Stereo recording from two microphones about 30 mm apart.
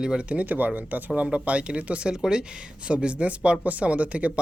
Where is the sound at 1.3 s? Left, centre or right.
Right.